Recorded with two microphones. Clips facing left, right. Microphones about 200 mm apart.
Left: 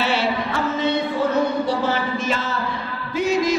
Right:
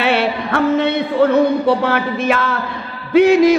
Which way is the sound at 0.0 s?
60° right (ahead or behind).